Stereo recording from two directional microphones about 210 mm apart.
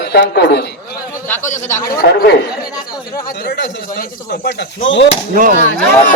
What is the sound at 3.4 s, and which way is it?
A man's voice, 55° left (ahead or behind).